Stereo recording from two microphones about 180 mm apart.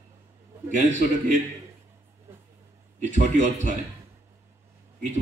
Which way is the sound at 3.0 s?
40° right (ahead or behind).